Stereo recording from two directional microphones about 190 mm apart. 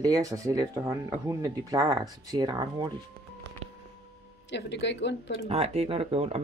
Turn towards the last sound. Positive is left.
turn(degrees=-30)  # may be behind; listen again after turning